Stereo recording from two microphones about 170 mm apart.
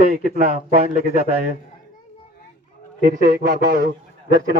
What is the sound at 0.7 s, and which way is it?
Speech, 40° right (ahead or behind).